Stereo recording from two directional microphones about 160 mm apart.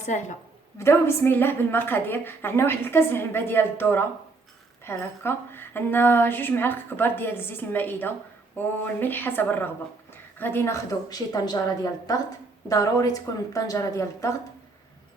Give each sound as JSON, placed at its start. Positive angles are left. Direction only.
{"t": 0.0, "sound": "a woman's voice", "side_deg": 50}
{"t": 0.8, "sound": "a woman's voice", "side_deg": 15}